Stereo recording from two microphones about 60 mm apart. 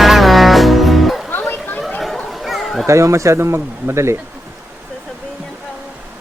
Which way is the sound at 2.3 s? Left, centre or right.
Centre.